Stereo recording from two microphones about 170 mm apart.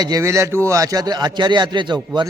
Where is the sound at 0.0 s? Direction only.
20° right (ahead or behind).